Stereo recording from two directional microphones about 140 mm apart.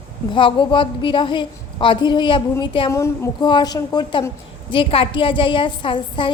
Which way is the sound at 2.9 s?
20° left (ahead or behind).